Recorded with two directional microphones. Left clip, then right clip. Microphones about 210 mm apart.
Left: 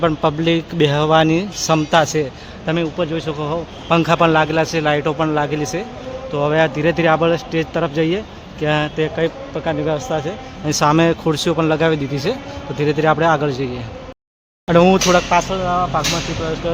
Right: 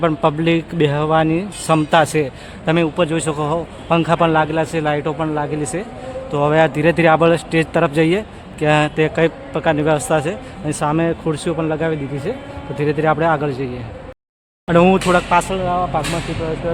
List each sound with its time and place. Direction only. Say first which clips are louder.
0.0 s a man's voice: even; 5° right (ahead or behind)
2.6 s a man's voice: right 3 dB; 20° right (ahead or behind)
3.8 s a man's voice: left 1 dB; centre (ahead or behind)
6.3 s a man's voice: right 2 dB; 15° right (ahead or behind)
10.7 s a man's voice: left 4 dB; 10° left (ahead or behind)
12.7 s a man's voice: left 1 dB; centre (ahead or behind)
14.7 s a man's voice: left 1 dB; centre (ahead or behind)
16.7 s speech: even; 20° left (ahead or behind)